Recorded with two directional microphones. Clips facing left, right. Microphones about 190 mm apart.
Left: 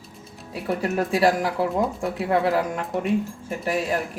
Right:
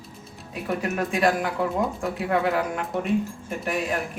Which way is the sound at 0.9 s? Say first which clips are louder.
Left 3 dB; 30° left (ahead or behind).